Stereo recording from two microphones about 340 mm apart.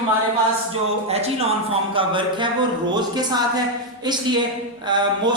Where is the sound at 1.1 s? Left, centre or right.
Centre.